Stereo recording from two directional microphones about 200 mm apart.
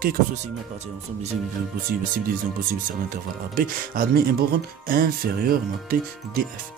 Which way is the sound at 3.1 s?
45° right (ahead or behind).